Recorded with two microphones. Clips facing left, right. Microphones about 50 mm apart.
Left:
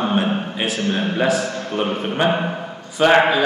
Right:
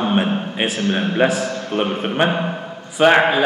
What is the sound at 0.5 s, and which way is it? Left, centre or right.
A man's voice, right.